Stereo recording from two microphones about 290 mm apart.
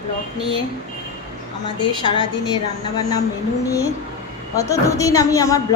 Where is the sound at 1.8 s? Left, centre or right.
Centre.